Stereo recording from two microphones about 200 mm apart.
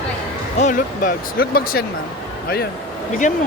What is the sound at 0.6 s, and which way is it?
Speech, 40° left (ahead or behind).